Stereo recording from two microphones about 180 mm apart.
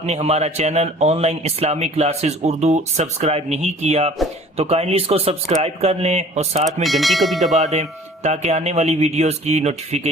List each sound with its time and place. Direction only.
0.0 s speech: 35° right (ahead or behind)
6.8 s speech: centre (ahead or behind)
7.5 s speech: 40° right (ahead or behind)